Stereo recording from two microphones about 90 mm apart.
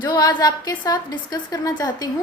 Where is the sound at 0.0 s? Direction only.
50° left (ahead or behind).